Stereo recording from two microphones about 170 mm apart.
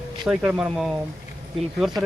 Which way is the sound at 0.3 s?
5° right (ahead or behind).